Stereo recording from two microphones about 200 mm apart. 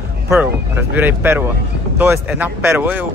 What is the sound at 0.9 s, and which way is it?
A man's voice, 10° right (ahead or behind).